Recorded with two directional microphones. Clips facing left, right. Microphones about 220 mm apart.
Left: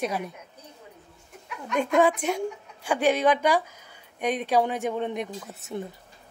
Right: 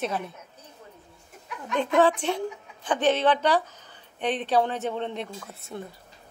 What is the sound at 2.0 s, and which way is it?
A woman's voice, 10° left (ahead or behind).